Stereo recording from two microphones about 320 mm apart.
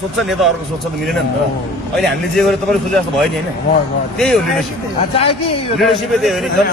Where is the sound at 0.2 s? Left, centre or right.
Centre.